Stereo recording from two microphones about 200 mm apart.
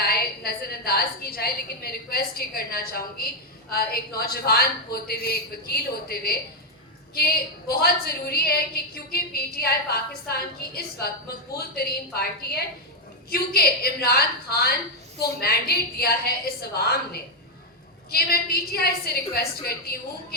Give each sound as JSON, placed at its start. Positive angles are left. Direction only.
{"t": 0.0, "sound": "a woman's voice", "side_deg": 50}